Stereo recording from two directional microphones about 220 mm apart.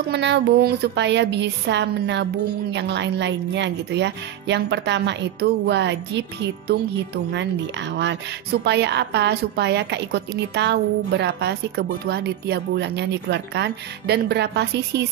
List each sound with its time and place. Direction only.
0.1 s a woman's voice: 50° right (ahead or behind)
7.9 s a woman's voice: 50° right (ahead or behind)